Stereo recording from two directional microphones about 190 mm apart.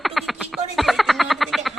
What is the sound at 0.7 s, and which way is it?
Frog, centre (ahead or behind).